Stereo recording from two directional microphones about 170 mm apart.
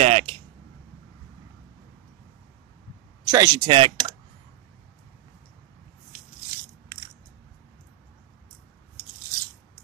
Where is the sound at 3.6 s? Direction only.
30° right (ahead or behind).